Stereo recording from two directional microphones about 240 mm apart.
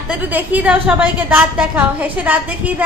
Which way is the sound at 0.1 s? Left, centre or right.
Centre.